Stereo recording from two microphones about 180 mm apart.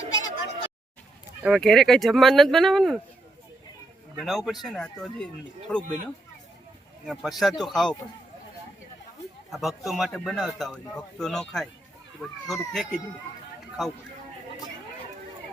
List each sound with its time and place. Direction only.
0.1 s a sound: 90° left
1.4 s a man's voice: centre (ahead or behind)
4.2 s a man's voice: centre (ahead or behind)
7.0 s a man's voice: centre (ahead or behind)
9.5 s a man's voice: centre (ahead or behind)